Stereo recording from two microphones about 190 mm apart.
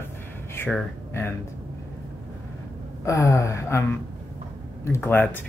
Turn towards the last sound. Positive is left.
turn(degrees=10)  # may be behind; listen again after turning